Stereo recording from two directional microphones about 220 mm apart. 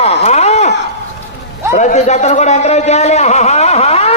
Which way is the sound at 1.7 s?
30° left (ahead or behind).